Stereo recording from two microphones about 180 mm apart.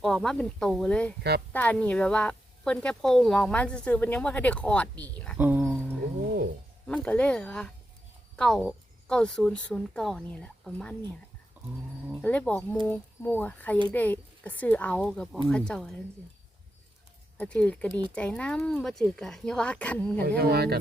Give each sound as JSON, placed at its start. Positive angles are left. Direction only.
{"t": 0.0, "sound": "a woman's voice", "side_deg": 5}
{"t": 5.4, "sound": "music", "side_deg": -10}
{"t": 6.8, "sound": "a woman's voice", "side_deg": 5}
{"t": 12.2, "sound": "a woman's voice", "side_deg": 10}
{"t": 17.3, "sound": "speech", "side_deg": 5}
{"t": 20.2, "sound": "speech", "side_deg": -60}